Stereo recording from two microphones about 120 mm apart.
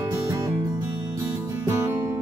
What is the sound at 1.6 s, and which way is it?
Music, 20° right (ahead or behind).